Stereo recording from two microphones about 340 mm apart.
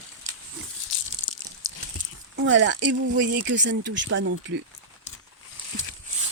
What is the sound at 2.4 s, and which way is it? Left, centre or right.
Speech, right.